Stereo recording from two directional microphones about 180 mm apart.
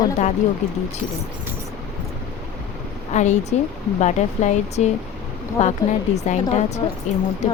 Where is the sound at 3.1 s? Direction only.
40° left (ahead or behind).